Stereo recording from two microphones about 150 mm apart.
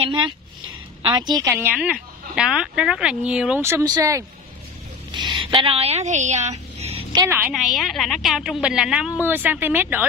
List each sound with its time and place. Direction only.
0.0 s speech: 30° right (ahead or behind)
1.5 s a woman's voice: 10° right (ahead or behind)
3.6 s a woman's voice: 20° right (ahead or behind); by 7.0 s 45° right (ahead or behind)
7.1 s a sound: 25° right (ahead or behind)
7.5 s a woman's voice: centre (ahead or behind)